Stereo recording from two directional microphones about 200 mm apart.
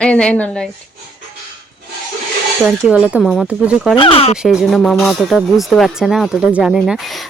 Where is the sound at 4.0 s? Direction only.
30° left (ahead or behind).